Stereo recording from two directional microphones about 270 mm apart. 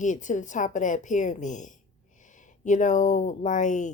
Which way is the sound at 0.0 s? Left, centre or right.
Left.